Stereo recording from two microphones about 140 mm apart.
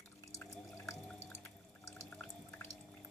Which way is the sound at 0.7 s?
20° left (ahead or behind).